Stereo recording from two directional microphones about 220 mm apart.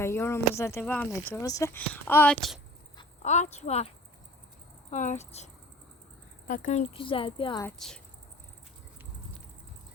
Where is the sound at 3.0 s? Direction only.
30° left (ahead or behind).